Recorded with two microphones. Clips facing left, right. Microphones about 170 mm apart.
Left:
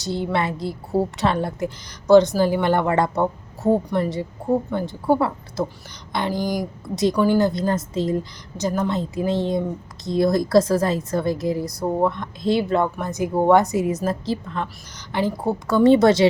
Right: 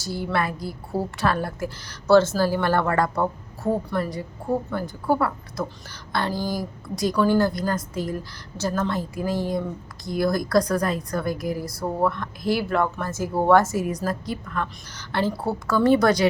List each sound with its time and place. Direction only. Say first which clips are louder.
0.0 s a woman's voice: left 3 dB; 20° left (ahead or behind)